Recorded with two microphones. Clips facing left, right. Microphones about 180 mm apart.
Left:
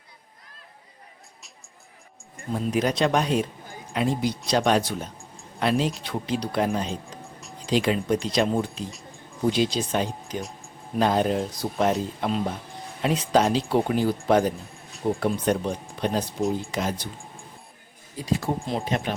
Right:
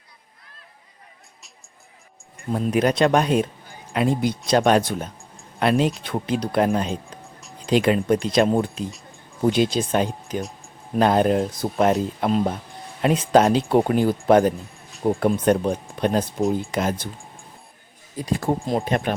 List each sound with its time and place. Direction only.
2.5 s speech: 55° right (ahead or behind)
7.2 s music: centre (ahead or behind)
7.7 s speech: 55° right (ahead or behind)
18.3 s speech: 50° right (ahead or behind)